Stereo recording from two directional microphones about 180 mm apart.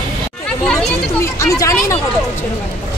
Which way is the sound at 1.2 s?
15° left (ahead or behind).